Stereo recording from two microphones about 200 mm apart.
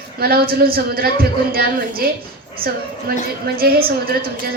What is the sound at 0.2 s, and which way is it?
Speech, 50° right (ahead or behind).